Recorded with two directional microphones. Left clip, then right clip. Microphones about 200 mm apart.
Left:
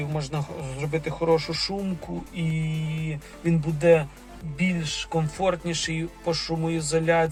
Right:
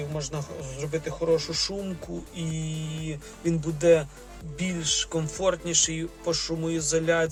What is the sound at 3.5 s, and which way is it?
Speech, 15° right (ahead or behind).